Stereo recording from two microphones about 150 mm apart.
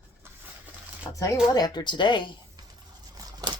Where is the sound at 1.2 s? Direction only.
25° left (ahead or behind).